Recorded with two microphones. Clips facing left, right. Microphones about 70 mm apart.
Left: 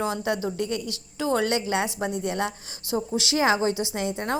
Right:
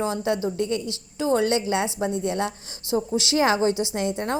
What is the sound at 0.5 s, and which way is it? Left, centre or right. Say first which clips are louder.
Speech: right 3 dB; right.